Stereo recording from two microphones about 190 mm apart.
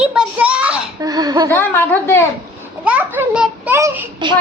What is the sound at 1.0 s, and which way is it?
Speech, 20° right (ahead or behind).